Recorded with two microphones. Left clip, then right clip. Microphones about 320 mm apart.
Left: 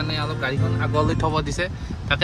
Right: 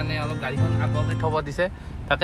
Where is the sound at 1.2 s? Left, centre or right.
Centre.